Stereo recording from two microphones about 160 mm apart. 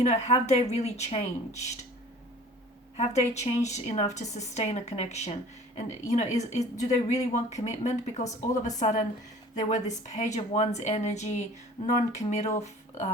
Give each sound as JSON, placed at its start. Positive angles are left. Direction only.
{"t": 0.0, "sound": "a woman's voice", "side_deg": 45}
{"t": 3.0, "sound": "a woman's voice", "side_deg": 45}